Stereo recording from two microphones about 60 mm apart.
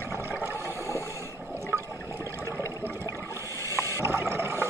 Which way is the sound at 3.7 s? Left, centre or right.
Right.